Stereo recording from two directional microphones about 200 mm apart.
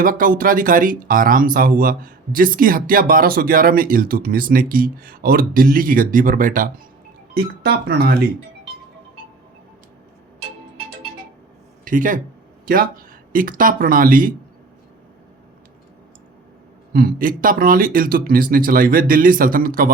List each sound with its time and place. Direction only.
0.0 s speech: 45° right (ahead or behind)
11.9 s speech: 40° right (ahead or behind)
16.9 s speech: 45° right (ahead or behind)